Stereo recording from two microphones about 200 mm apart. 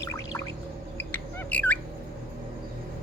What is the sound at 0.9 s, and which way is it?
Squawk, 10° left (ahead or behind).